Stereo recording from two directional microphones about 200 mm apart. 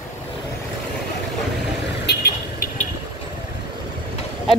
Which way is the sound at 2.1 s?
55° left (ahead or behind).